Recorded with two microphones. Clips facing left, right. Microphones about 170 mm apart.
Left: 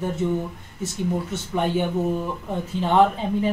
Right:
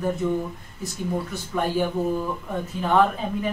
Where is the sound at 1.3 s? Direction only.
25° left (ahead or behind).